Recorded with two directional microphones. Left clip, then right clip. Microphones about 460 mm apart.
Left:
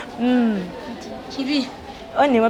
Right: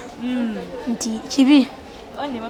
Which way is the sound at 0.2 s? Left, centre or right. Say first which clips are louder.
Left 7 dB; left.